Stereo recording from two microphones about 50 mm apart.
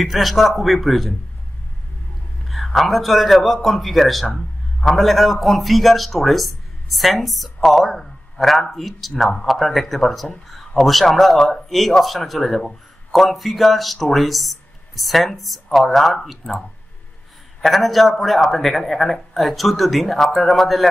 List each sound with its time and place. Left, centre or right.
0.0 s a man's voice: centre
2.4 s a man's voice: centre